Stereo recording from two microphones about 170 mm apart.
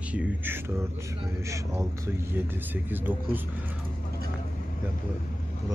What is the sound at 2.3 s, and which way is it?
Speech, 10° right (ahead or behind).